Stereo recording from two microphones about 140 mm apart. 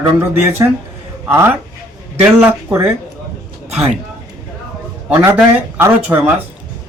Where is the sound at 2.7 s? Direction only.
15° right (ahead or behind).